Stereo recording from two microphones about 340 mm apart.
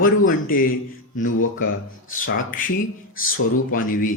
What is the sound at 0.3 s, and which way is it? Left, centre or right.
Speech, left.